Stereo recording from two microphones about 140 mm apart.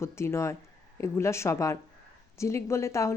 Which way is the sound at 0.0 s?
20° left (ahead or behind).